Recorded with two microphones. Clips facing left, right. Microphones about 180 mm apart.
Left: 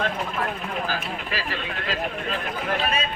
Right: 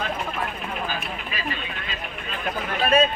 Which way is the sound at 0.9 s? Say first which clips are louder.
Left 2 dB; 85° left.